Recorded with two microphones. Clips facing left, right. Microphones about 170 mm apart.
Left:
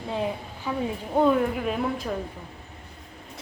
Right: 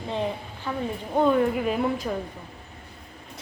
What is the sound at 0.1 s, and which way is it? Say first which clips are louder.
A woman's voice: even; 5° left (ahead or behind).